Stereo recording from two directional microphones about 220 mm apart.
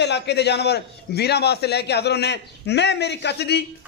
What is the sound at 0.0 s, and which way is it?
A man's voice, 50° left (ahead or behind).